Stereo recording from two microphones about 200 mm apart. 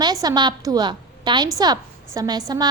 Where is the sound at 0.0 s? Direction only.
20° right (ahead or behind).